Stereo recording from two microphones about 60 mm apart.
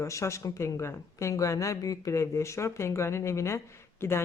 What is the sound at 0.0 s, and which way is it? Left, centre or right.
Speech, left.